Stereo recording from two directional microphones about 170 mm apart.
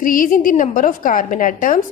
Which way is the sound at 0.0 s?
55° left (ahead or behind).